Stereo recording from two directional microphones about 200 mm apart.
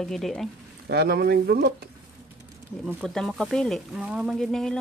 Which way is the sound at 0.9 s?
50° right (ahead or behind).